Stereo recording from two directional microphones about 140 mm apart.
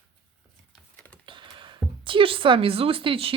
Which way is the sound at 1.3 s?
35° right (ahead or behind).